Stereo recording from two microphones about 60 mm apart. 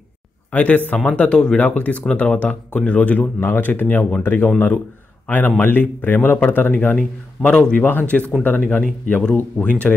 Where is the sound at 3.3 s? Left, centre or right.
Left.